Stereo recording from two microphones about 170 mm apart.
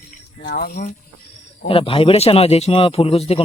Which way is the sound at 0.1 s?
55° left (ahead or behind).